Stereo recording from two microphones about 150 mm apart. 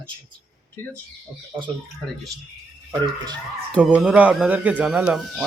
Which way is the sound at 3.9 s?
5° right (ahead or behind).